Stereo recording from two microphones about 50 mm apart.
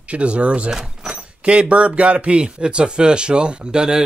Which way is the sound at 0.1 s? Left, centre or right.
Right.